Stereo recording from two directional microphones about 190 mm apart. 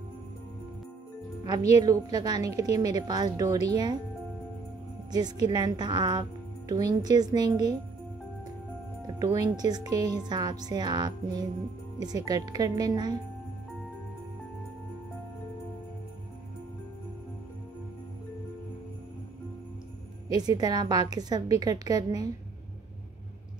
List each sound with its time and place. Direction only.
1.8 s speech: 20° right (ahead or behind)
5.1 s speech: 20° right (ahead or behind)
9.0 s speech: 20° right (ahead or behind)
20.2 s speech: 20° right (ahead or behind)